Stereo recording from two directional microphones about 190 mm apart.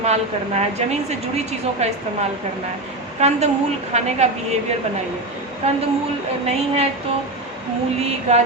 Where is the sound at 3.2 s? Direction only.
35° right (ahead or behind).